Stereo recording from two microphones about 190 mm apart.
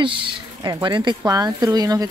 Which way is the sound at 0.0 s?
25° right (ahead or behind).